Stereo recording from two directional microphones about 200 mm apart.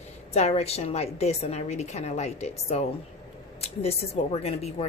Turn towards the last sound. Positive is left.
turn(degrees=30)  # may be behind; listen again after turning